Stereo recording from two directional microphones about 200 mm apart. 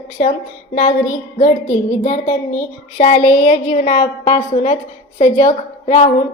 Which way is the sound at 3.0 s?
40° left (ahead or behind).